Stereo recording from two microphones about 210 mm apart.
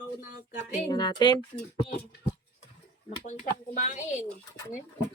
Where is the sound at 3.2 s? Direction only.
35° left (ahead or behind).